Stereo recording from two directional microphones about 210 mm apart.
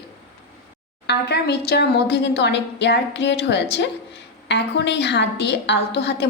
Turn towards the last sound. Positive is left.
turn(degrees=55)  # may be behind; listen again after turning